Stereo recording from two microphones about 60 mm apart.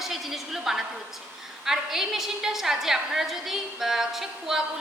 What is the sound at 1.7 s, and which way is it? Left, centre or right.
A woman's voice, centre.